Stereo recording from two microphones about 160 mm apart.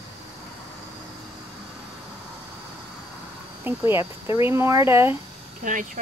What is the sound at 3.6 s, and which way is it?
Speech, 15° right (ahead or behind).